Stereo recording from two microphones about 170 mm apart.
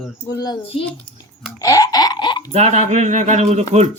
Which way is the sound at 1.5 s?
20° left (ahead or behind).